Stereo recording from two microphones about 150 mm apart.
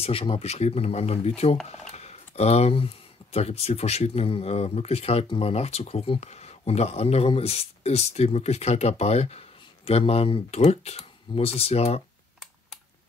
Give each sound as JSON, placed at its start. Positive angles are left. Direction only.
{"t": 0.0, "sound": "speech", "side_deg": 40}